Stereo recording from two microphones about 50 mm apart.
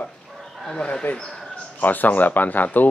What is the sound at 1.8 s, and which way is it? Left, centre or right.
Speech, left.